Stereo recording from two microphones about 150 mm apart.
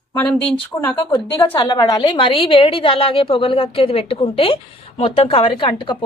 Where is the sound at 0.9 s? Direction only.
25° left (ahead or behind).